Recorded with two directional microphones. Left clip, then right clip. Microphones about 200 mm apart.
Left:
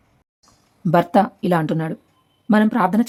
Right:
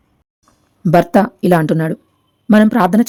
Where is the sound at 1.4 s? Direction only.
15° right (ahead or behind).